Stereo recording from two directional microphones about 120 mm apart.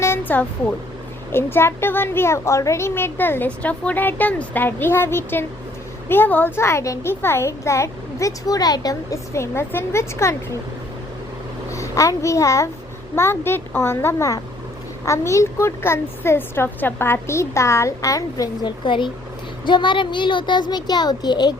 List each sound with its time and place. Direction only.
0.0 s a sound: 20° left (ahead or behind)
1.3 s a child's voice: 20° left (ahead or behind)
11.7 s a child's voice: 25° left (ahead or behind)
18.9 s speech: 45° left (ahead or behind)